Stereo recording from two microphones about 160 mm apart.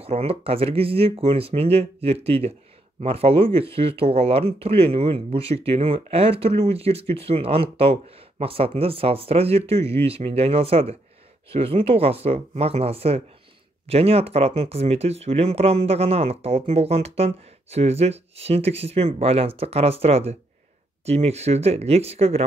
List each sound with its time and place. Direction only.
0.0 s speech: 40° right (ahead or behind)